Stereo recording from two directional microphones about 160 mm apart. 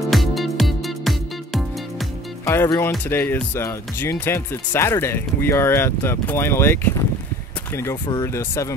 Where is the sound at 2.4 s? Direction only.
15° left (ahead or behind).